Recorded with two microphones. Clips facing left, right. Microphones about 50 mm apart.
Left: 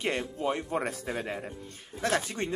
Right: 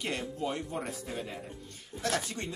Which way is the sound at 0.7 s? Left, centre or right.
Left.